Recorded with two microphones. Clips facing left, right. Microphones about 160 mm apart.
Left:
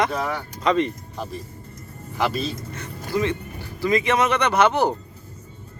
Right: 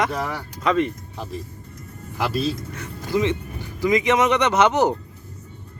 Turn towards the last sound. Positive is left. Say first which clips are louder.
# right 1 dB
turn(degrees=-15)  # may be behind; listen again after turning